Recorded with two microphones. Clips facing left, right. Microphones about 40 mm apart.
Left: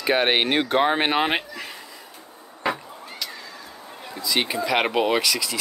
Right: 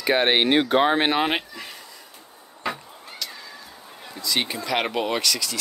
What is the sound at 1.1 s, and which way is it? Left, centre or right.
Speech, left.